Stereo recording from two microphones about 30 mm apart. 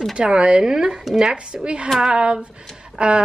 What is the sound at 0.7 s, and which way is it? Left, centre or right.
Speech, centre.